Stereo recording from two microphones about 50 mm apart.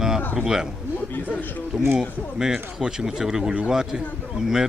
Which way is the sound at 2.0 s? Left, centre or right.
Centre.